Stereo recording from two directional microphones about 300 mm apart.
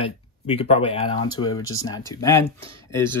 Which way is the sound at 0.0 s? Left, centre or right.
Centre.